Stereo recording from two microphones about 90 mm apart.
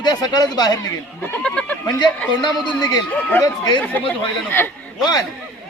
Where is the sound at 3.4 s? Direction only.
45° left (ahead or behind).